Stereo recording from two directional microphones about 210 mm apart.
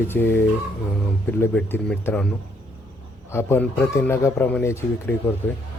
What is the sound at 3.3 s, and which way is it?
Speech, 10° left (ahead or behind).